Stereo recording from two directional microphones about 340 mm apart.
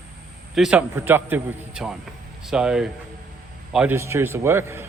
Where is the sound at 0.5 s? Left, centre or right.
Centre.